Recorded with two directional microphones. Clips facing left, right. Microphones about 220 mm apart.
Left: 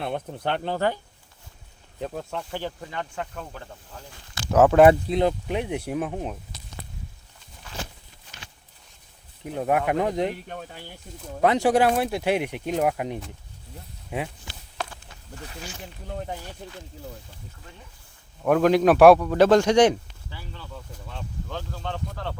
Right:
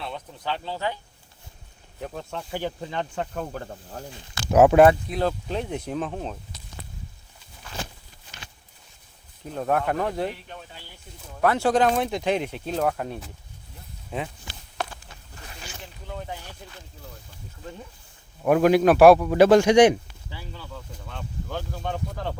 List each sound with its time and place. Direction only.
0.0 s speech: 55° left (ahead or behind)
2.5 s a man's voice: 15° right (ahead or behind)
2.9 s speech: 30° right (ahead or behind)
3.3 s speech: 45° right (ahead or behind)
4.1 s a man's voice: 15° right (ahead or behind)
4.9 s speech: 25° left (ahead or behind)
9.4 s speech: 15° left (ahead or behind)
11.3 s speech: 20° left (ahead or behind)
18.4 s a man's voice: 5° right (ahead or behind)
21.5 s a man's voice: 15° right (ahead or behind)